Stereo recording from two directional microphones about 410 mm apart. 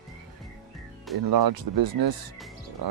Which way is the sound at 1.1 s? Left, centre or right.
Right.